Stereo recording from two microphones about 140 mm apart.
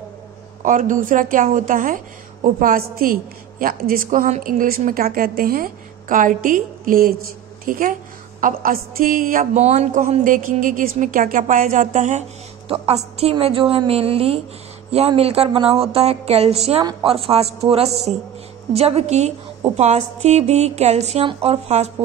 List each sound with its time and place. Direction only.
0.6 s speech: 70° right (ahead or behind)
2.4 s a woman's voice: 90° right; by 10.2 s 50° right (ahead or behind)
10.2 s a woman's voice: 70° right (ahead or behind); by 21.9 s 50° right (ahead or behind)